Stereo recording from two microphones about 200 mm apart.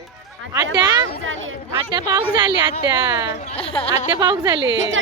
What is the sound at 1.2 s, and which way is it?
Speech, 80° right.